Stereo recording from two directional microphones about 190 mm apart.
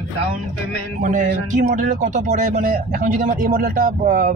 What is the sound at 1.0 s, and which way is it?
Speech, 45° right (ahead or behind).